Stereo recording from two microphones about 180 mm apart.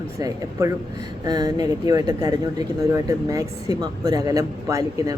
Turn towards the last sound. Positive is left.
turn(degrees=-20)  # may be behind; listen again after turning